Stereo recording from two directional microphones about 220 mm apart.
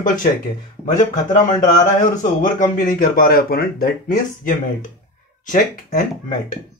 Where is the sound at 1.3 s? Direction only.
35° left (ahead or behind).